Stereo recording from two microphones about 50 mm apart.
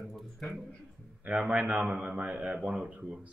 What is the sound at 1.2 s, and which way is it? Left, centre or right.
Speech, right.